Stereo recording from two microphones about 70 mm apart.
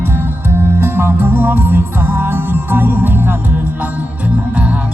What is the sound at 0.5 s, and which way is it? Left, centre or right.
Music, right.